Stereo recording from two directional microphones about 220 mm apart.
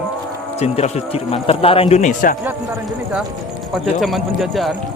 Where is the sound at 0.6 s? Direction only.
30° left (ahead or behind).